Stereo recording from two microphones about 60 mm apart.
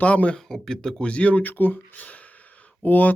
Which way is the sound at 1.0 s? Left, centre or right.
Centre.